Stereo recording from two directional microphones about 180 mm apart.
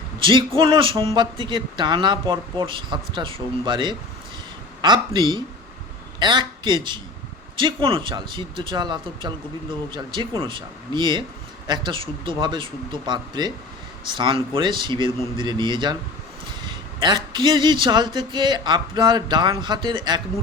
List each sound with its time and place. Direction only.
0.2 s a man's voice: 25° right (ahead or behind)